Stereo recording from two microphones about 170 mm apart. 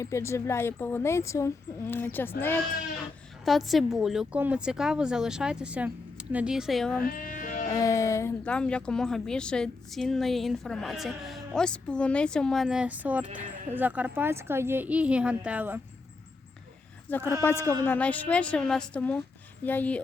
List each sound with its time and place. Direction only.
0.0 s a woman's voice: 15° left (ahead or behind)
3.4 s a woman's voice: centre (ahead or behind)
7.0 s sheep: 55° left (ahead or behind)
7.7 s music: 20° left (ahead or behind)
8.4 s a woman's voice: 5° left (ahead or behind); by 15.8 s 10° right (ahead or behind)
17.1 s a woman's voice: 10° left (ahead or behind)